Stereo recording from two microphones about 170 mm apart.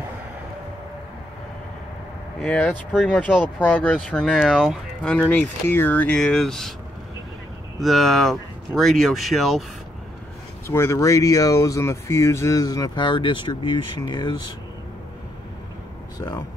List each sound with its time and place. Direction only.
2.4 s speech: 5° left (ahead or behind)
3.2 s speech: 10° left (ahead or behind)
7.8 s speech: centre (ahead or behind)
10.7 s speech: 15° left (ahead or behind)
16.2 s speech: 25° left (ahead or behind)